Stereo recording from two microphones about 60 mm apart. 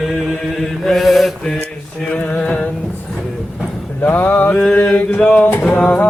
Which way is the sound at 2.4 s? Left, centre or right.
Centre.